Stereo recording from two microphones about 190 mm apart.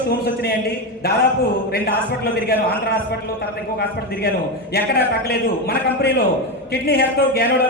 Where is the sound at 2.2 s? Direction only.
55° left (ahead or behind).